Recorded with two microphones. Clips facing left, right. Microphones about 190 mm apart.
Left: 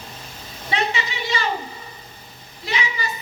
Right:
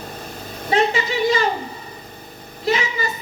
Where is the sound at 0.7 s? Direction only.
45° right (ahead or behind).